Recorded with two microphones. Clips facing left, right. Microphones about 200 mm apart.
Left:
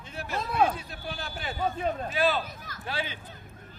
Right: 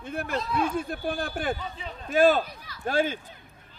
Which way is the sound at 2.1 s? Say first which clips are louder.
Right 9 dB; 45° right (ahead or behind).